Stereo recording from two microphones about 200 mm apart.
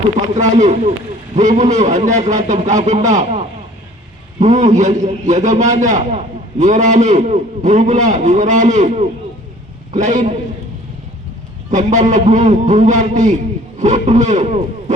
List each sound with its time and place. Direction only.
0.3 s a man's voice: 35° right (ahead or behind)
11.7 s a man's voice: 35° right (ahead or behind)